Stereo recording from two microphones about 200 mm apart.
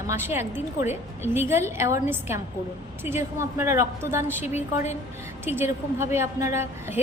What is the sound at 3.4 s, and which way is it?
A woman's voice, 15° right (ahead or behind).